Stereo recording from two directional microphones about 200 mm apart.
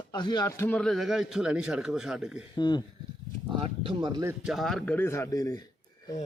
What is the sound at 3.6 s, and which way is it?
Speech, 25° right (ahead or behind).